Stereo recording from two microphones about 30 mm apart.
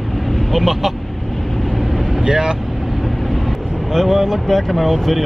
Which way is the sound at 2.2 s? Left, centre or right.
Right.